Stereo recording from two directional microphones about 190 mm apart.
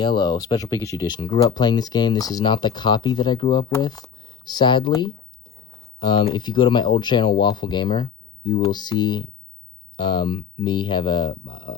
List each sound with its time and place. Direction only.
0.0 s speech: 25° left (ahead or behind)